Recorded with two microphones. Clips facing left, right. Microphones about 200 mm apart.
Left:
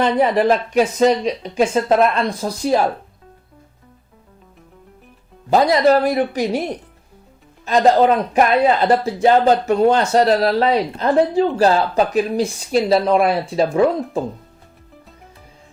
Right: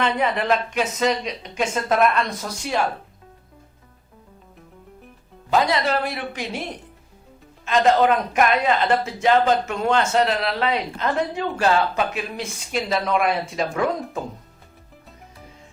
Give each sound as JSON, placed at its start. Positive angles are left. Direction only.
{"t": 0.0, "sound": "a man's voice", "side_deg": 35}
{"t": 5.5, "sound": "a man's voice", "side_deg": 40}
{"t": 7.6, "sound": "a man's voice", "side_deg": 35}